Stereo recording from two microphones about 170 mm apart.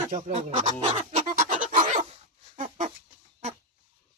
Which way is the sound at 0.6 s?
45° right (ahead or behind).